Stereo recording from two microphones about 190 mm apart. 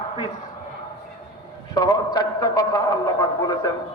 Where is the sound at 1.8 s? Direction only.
20° left (ahead or behind).